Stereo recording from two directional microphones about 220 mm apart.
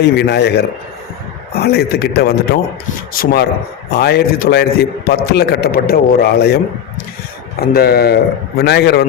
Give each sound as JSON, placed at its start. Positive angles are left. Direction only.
{"t": 0.3, "sound": "a man's voice", "side_deg": 50}
{"t": 7.6, "sound": "a man's voice", "side_deg": 45}